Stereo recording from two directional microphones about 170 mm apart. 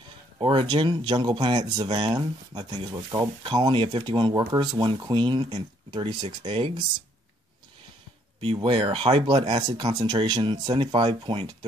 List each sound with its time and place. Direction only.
0.4 s speech: 30° right (ahead or behind)
8.4 s speech: 30° right (ahead or behind)